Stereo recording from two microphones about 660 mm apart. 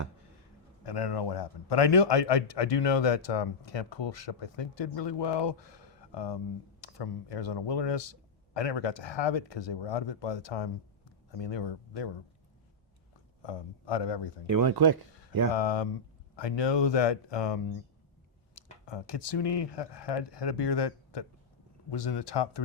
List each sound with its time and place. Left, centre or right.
0.9 s a man's voice: left
13.4 s a man's voice: left
14.4 s speech: right
15.5 s a man's voice: left
18.5 s a man's voice: left